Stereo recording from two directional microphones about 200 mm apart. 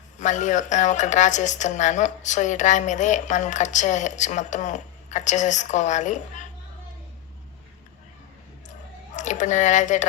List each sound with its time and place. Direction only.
0.2 s a woman's voice: 40° left (ahead or behind)
9.1 s speech: 40° left (ahead or behind)